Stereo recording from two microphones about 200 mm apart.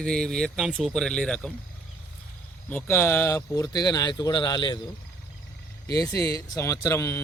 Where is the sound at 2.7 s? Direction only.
10° left (ahead or behind).